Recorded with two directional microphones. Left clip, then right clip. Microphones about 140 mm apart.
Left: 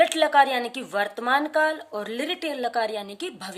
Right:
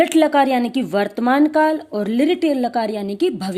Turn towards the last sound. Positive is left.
turn(degrees=-40)  # may be behind; listen again after turning